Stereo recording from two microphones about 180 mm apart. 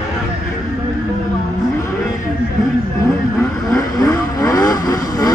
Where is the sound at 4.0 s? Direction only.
20° left (ahead or behind).